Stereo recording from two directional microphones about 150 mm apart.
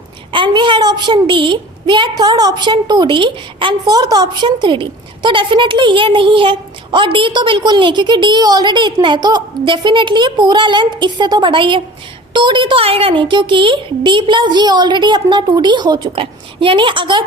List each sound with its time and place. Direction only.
0.3 s a woman's voice: 30° right (ahead or behind)